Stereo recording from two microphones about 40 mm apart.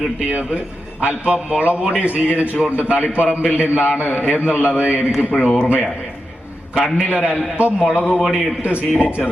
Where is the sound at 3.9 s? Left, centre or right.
Left.